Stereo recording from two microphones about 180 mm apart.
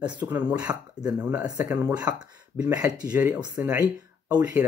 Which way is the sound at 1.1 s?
5° right (ahead or behind).